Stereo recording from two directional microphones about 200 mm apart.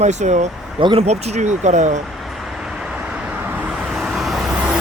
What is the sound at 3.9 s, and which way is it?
Vehicle, centre (ahead or behind).